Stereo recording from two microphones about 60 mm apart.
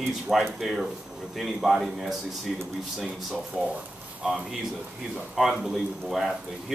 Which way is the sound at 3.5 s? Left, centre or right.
Centre.